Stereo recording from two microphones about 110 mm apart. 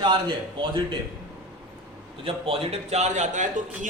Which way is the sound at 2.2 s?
65° right (ahead or behind).